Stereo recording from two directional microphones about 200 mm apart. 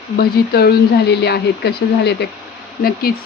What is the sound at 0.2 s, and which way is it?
Speech, 50° left (ahead or behind).